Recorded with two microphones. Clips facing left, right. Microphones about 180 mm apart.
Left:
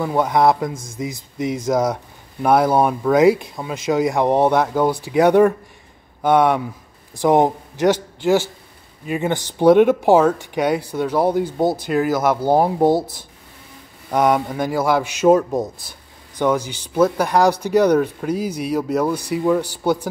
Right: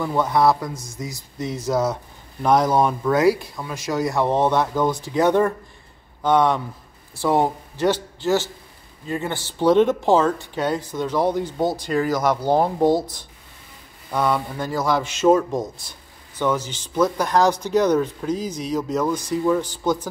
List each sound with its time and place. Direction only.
0.0 s a man's voice: 15° left (ahead or behind)
14.1 s speech: 15° left (ahead or behind)